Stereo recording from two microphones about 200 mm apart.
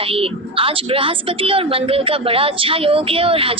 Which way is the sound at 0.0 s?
30° right (ahead or behind).